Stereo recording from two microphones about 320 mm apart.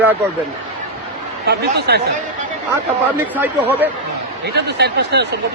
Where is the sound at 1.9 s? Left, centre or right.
Right.